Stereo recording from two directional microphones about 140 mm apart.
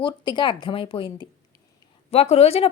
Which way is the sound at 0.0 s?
35° left (ahead or behind).